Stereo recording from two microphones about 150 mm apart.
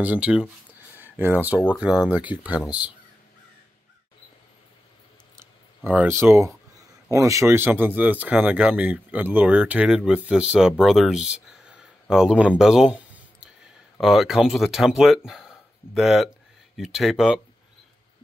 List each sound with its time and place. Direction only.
0.0 s speech: 10° right (ahead or behind)
5.9 s speech: 15° right (ahead or behind)